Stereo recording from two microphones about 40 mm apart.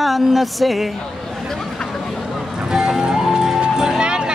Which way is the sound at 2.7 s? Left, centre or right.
Centre.